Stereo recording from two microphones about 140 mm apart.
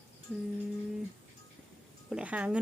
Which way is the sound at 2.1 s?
10° right (ahead or behind).